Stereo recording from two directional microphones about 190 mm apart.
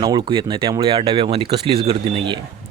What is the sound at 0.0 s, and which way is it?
Speech, 20° right (ahead or behind).